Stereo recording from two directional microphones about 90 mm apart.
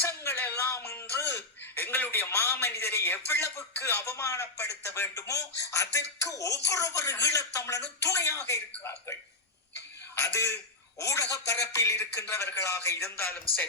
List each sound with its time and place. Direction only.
0.0 s a sound: 30° left (ahead or behind)
5.1 s speech: 40° left (ahead or behind)
10.2 s speech: 35° left (ahead or behind)